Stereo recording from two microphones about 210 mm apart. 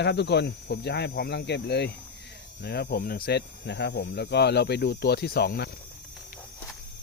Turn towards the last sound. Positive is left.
turn(degrees=50)  # may be behind; listen again after turning